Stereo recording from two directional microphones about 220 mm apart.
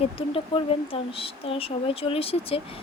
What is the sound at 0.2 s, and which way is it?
Speech, 25° left (ahead or behind).